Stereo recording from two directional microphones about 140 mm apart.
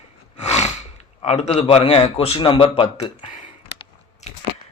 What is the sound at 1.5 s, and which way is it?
Speech, 40° left (ahead or behind).